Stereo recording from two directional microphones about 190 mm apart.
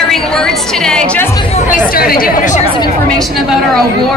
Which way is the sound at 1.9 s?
50° left (ahead or behind).